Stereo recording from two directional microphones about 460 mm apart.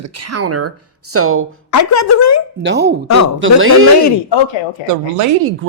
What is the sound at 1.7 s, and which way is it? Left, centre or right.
Speech, left.